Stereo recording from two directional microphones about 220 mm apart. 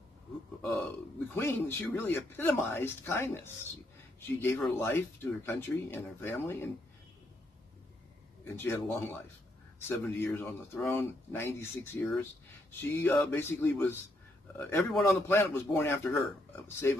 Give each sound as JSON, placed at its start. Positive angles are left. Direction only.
{"t": 1.3, "sound": "speech", "side_deg": 10}
{"t": 8.5, "sound": "speech", "side_deg": 10}